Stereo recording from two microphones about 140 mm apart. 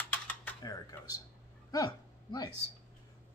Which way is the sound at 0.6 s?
25° left (ahead or behind).